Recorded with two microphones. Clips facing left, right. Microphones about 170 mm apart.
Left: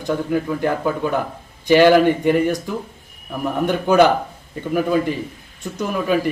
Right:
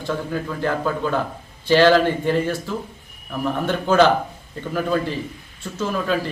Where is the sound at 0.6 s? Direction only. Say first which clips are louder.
Left 2 dB; 15° left (ahead or behind).